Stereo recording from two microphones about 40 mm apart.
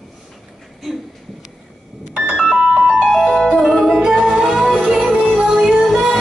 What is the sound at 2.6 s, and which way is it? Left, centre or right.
Music, right.